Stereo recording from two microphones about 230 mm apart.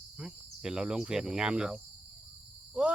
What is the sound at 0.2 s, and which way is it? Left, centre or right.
Speech, centre.